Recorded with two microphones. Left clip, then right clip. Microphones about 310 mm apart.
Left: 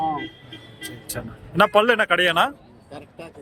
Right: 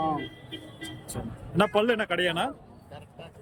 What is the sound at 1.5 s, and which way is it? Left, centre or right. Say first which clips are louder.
Speech: left 8 dB; centre.